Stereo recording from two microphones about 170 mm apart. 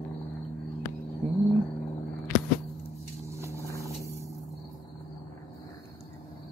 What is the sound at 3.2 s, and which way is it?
Vehicle, 15° right (ahead or behind).